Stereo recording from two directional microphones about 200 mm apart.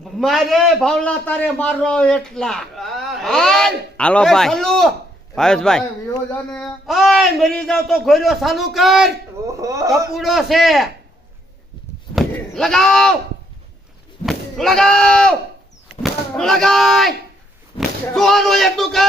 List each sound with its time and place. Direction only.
0.2 s a man's voice: centre (ahead or behind)
9.5 s speech: 15° right (ahead or behind)
10.2 s a man's voice: centre (ahead or behind)
12.1 s a sound: centre (ahead or behind)
14.3 s a man's voice: centre (ahead or behind)